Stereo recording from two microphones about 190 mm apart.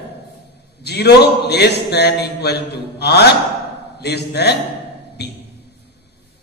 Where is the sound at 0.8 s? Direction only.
60° left (ahead or behind).